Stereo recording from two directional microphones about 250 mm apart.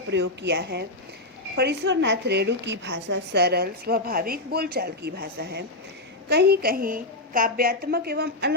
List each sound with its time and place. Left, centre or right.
0.1 s a woman's voice: right